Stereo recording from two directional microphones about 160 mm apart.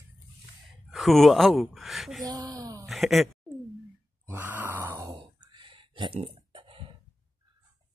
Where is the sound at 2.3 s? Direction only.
25° right (ahead or behind).